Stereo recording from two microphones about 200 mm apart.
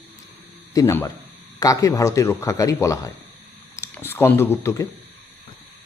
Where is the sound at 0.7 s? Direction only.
15° left (ahead or behind).